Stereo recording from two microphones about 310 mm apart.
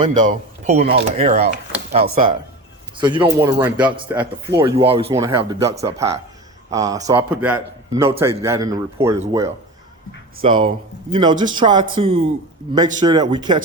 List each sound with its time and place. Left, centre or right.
0.0 s speech: right